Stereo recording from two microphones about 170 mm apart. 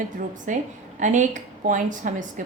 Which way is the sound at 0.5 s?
45° right (ahead or behind).